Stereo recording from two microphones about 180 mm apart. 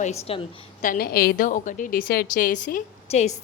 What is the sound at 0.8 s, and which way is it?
A woman's voice, 55° left (ahead or behind).